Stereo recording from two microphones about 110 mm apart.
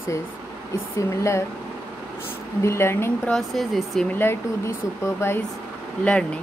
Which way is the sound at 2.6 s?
25° left (ahead or behind).